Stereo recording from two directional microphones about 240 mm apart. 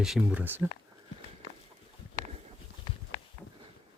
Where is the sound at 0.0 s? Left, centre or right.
Centre.